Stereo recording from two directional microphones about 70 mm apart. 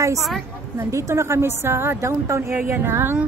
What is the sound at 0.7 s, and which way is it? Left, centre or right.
A woman's voice, right.